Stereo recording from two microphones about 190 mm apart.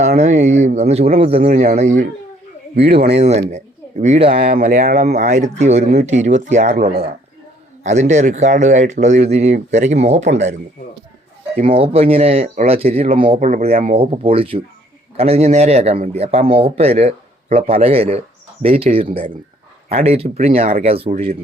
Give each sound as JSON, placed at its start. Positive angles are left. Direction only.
{"t": 0.2, "sound": "a man's voice", "side_deg": -35}
{"t": 4.0, "sound": "a man's voice", "side_deg": -35}
{"t": 4.4, "sound": "speech", "side_deg": -55}
{"t": 4.6, "sound": "speech", "side_deg": -40}
{"t": 5.2, "sound": "a man's voice", "side_deg": -40}
{"t": 7.9, "sound": "a man's voice", "side_deg": -40}
{"t": 11.5, "sound": "a man's voice", "side_deg": -30}